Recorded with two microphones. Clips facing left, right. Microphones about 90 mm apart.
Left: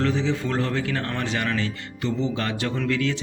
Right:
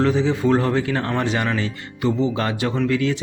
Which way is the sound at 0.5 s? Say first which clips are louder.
Right 6 dB; 25° right (ahead or behind).